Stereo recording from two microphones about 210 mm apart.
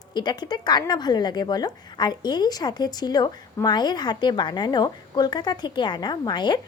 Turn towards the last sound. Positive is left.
turn(degrees=20)  # may be behind; listen again after turning